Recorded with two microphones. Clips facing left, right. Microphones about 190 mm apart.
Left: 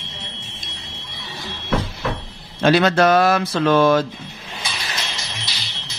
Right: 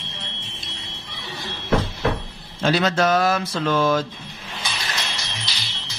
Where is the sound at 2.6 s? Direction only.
65° left (ahead or behind).